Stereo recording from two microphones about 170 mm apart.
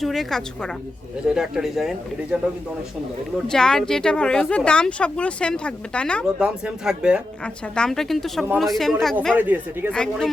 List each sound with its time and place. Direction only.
0.0 s speech: centre (ahead or behind)
3.5 s speech: 5° left (ahead or behind)
6.2 s speech: 5° right (ahead or behind)
9.3 s speech: 10° right (ahead or behind)
9.9 s speech: 5° left (ahead or behind)